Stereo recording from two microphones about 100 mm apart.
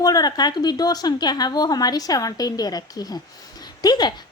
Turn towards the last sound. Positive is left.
turn(degrees=45)  # may be behind; listen again after turning